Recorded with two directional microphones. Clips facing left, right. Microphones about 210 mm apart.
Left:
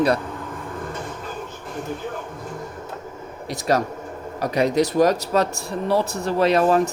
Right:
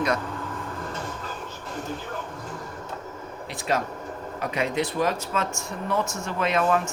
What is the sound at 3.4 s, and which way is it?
Speech, 40° left (ahead or behind).